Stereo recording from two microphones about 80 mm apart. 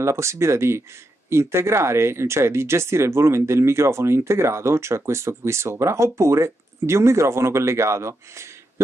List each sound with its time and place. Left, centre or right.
0.0 s speech: right